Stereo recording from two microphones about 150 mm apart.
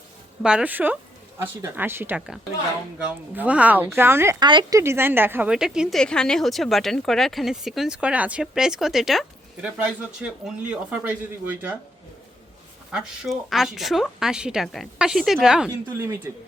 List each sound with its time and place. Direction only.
0.4 s speech: 10° right (ahead or behind)
4.4 s a woman's voice: 30° right (ahead or behind)
4.8 s a woman's voice: 15° right (ahead or behind)
12.9 s a woman's voice: 5° right (ahead or behind)